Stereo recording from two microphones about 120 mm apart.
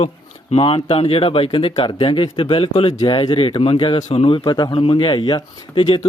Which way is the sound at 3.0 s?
40° left (ahead or behind).